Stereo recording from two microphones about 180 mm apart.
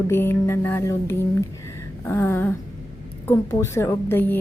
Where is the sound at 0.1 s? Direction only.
15° left (ahead or behind).